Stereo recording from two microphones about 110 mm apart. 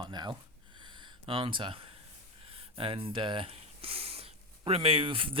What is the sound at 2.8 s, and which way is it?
Speech, 55° right (ahead or behind).